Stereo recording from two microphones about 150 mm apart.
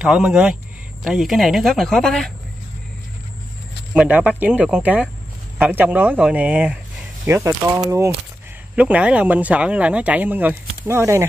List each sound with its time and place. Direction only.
0.0 s speech: 5° right (ahead or behind)
3.9 s speech: 10° right (ahead or behind)
7.2 s speech: 20° right (ahead or behind)
8.7 s speech: 10° right (ahead or behind)